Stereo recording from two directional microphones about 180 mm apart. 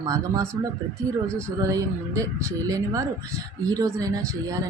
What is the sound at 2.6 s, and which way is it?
Speech, 20° right (ahead or behind).